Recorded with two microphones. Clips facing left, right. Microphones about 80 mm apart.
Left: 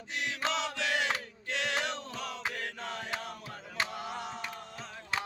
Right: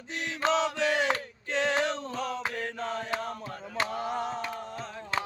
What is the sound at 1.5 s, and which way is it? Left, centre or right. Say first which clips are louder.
Chant: right 6 dB; right.